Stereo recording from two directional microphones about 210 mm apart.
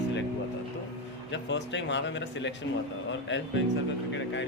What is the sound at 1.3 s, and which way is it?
Speech, 60° left (ahead or behind).